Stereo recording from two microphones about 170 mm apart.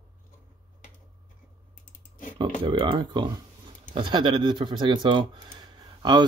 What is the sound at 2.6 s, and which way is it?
Speech, 30° right (ahead or behind).